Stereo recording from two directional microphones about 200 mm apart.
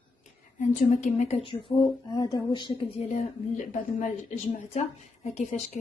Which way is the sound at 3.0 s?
40° left (ahead or behind).